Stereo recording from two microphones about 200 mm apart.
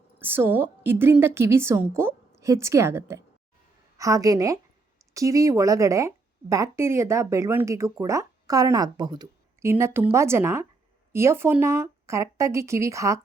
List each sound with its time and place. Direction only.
0.2 s speech: 10° right (ahead or behind)